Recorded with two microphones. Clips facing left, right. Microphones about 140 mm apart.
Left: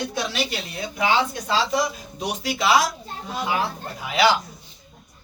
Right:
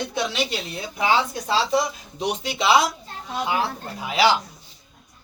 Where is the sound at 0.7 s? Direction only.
30° right (ahead or behind).